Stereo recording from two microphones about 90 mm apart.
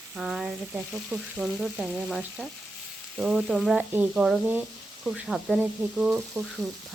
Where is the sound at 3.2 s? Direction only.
5° right (ahead or behind).